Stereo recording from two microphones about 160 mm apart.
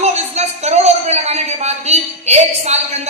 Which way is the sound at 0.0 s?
45° right (ahead or behind).